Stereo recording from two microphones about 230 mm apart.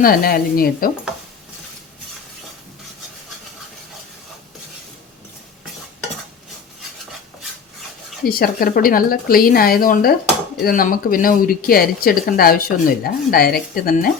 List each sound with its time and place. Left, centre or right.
0.0 s speech: left
8.2 s speech: left